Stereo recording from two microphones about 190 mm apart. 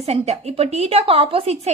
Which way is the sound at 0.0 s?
35° right (ahead or behind).